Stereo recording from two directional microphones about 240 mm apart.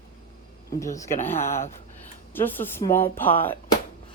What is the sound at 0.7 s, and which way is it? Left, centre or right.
Speech, centre.